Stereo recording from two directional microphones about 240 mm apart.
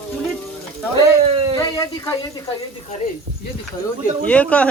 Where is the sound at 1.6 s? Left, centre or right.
Centre.